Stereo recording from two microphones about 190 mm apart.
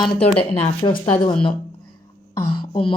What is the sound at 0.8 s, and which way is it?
Speech, 25° left (ahead or behind).